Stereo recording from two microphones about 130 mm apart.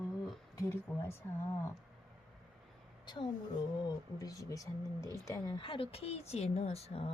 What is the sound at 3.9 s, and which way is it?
Speech, 25° left (ahead or behind).